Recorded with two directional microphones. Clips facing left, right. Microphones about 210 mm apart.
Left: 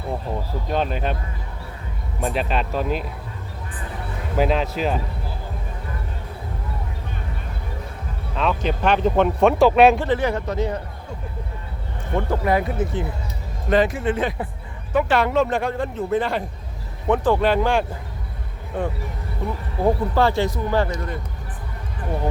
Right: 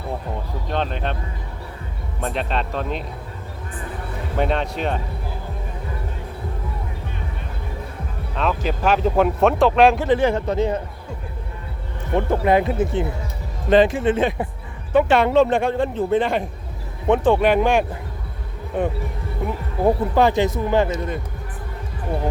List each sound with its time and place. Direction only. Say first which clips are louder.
0.7 s speech: left 1 dB; 5° left (ahead or behind)
2.2 s speech: left 1 dB; 5° left (ahead or behind)
4.4 s speech: left 2 dB; centre (ahead or behind)
8.4 s speech: even; 5° right (ahead or behind)
10.2 s a man's voice: right 4 dB; 30° right (ahead or behind)
12.1 s a man's voice: right 3 dB; 20° right (ahead or behind)
19.8 s a man's voice: right 2 dB; 20° right (ahead or behind)